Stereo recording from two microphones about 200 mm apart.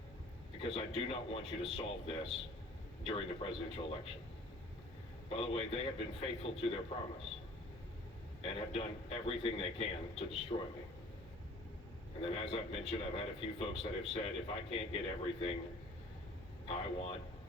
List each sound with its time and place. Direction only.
0.6 s speech: 30° left (ahead or behind)
5.3 s speech: 30° left (ahead or behind)
8.4 s a man's voice: 30° left (ahead or behind)
12.2 s speech: 30° left (ahead or behind)
16.6 s speech: 30° left (ahead or behind)